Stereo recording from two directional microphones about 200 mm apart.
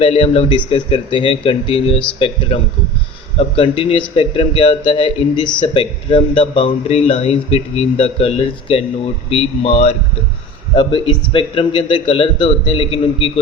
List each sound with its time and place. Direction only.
0.0 s speech: 30° left (ahead or behind)